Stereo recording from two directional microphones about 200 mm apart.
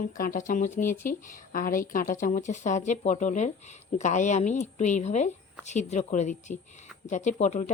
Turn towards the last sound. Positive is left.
turn(degrees=35)  # may be behind; listen again after turning